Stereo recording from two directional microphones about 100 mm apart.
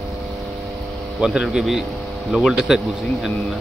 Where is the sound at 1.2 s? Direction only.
5° right (ahead or behind).